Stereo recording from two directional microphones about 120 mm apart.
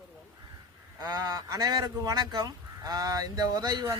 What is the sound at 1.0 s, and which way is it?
Speech, 30° right (ahead or behind).